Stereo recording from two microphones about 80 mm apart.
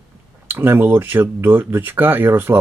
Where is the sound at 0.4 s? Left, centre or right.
Right.